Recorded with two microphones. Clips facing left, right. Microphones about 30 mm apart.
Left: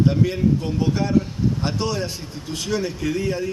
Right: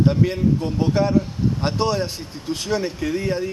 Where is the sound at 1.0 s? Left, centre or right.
Right.